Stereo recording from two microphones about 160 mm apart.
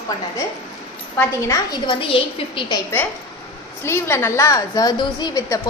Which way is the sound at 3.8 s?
15° left (ahead or behind).